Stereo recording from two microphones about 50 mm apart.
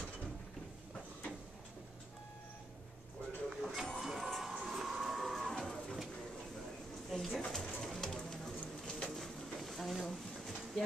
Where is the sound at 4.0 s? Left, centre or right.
Centre.